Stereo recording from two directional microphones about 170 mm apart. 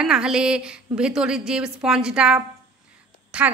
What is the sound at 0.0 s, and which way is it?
A woman's voice, 5° right (ahead or behind).